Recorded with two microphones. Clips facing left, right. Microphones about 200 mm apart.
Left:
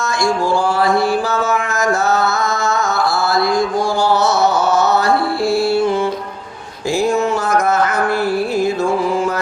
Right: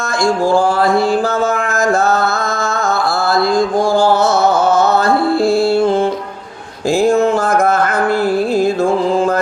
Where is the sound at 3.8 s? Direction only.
50° right (ahead or behind).